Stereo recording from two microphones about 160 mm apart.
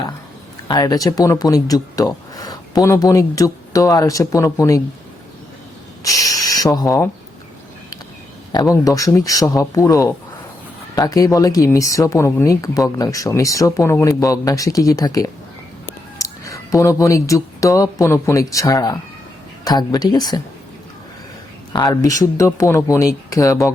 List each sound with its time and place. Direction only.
0.7 s speech: 25° left (ahead or behind)
6.0 s speech: 20° left (ahead or behind)
8.5 s speech: 20° left (ahead or behind)
21.7 s speech: 25° left (ahead or behind)